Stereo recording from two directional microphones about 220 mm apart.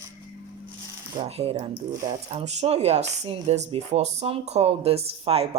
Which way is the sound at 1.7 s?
15° right (ahead or behind).